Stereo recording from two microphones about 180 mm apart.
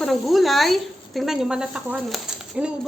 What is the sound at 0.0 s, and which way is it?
Speech, centre (ahead or behind).